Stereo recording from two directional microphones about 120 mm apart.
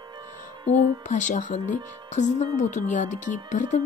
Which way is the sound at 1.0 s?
90° left.